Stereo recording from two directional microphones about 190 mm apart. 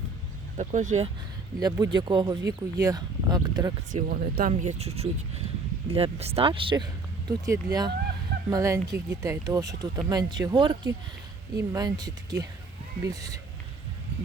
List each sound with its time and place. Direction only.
0.5 s speech: 40° right (ahead or behind)
1.5 s speech: 20° right (ahead or behind)
3.9 s speech: 45° right (ahead or behind); by 13.4 s 20° right (ahead or behind)